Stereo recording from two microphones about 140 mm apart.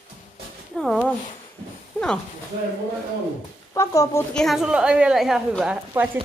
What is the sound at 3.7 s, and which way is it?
Speech, 20° left (ahead or behind).